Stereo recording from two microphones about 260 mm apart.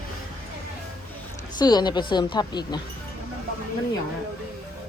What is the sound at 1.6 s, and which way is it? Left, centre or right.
Speech, centre.